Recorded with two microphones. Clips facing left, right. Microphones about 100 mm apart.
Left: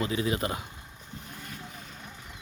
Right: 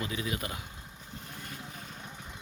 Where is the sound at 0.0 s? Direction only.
35° left (ahead or behind).